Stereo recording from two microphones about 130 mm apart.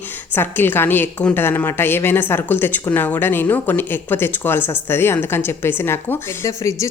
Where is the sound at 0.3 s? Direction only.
15° left (ahead or behind).